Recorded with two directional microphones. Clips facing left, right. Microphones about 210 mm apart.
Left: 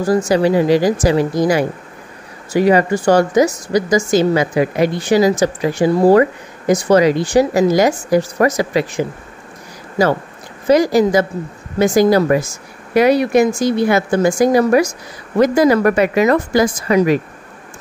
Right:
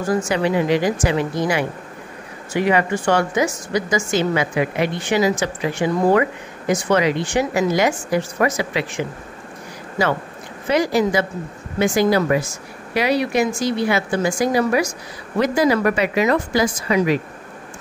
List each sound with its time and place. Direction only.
0.0 s a woman's voice: 35° left (ahead or behind)
10.7 s a woman's voice: 40° left (ahead or behind)